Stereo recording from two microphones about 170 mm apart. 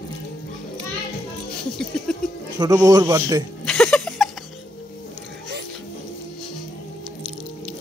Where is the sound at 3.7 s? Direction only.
5° left (ahead or behind).